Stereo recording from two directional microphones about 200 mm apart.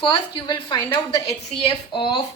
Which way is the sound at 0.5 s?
10° left (ahead or behind).